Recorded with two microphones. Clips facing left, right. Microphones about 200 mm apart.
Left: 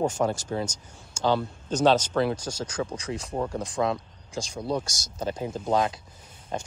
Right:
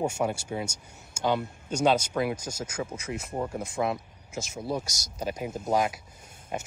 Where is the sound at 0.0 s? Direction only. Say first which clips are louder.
Left 3 dB; 10° right (ahead or behind).